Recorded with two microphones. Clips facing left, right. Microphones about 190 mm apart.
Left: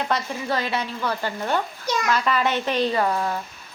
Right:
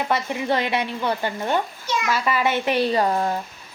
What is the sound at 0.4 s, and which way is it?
Speech, 20° right (ahead or behind).